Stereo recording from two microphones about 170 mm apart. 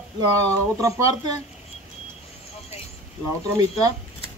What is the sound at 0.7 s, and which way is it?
Speech, 20° right (ahead or behind).